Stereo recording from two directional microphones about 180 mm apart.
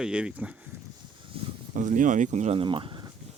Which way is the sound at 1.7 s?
45° right (ahead or behind).